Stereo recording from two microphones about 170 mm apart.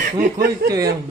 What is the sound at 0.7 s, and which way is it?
Speech, 20° right (ahead or behind).